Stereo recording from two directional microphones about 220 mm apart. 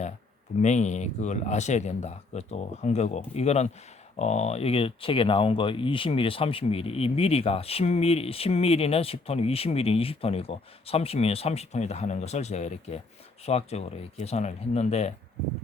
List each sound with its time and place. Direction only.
0.6 s speech: 30° left (ahead or behind)